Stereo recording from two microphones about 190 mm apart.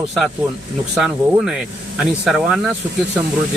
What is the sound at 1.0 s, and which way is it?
Speech, 5° right (ahead or behind).